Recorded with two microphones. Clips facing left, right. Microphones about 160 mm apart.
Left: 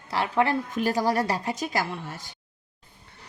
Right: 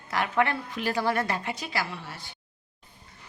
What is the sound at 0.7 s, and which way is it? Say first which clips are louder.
A woman's voice: left 3 dB; 45° left (ahead or behind).